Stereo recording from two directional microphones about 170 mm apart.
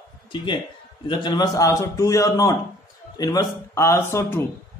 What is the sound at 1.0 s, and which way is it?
A man's voice, 25° left (ahead or behind).